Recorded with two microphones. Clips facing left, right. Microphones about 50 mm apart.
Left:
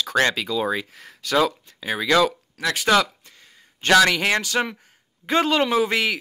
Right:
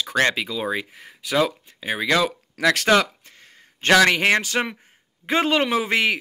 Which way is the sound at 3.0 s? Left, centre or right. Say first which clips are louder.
Even; right.